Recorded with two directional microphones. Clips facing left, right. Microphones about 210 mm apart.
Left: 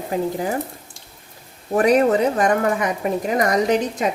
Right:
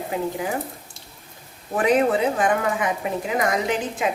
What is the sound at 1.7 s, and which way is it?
A woman's voice, 40° left (ahead or behind).